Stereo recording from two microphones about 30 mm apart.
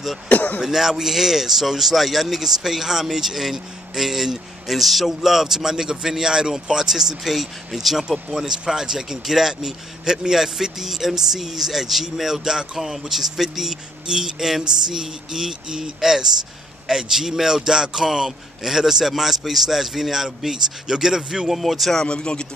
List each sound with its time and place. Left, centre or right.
0.3 s speech: left
0.6 s speech: centre
10.3 s speech: centre
21.5 s speech: centre
22.0 s speech: left